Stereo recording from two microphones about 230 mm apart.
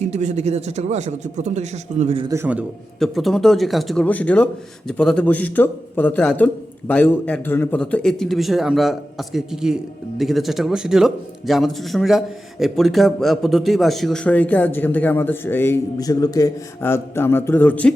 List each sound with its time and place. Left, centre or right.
0.0 s speech: right
2.2 s a man's voice: centre